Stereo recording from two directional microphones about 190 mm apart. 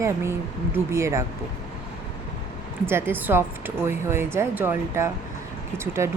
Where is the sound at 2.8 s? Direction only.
10° right (ahead or behind).